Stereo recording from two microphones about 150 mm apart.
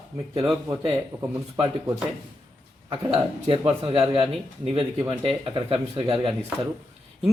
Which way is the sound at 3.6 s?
25° right (ahead or behind).